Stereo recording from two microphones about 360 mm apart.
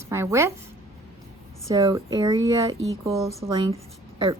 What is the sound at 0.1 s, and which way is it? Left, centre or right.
Speech, centre.